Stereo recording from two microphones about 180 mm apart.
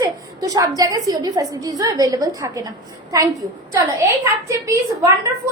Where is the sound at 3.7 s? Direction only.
15° right (ahead or behind).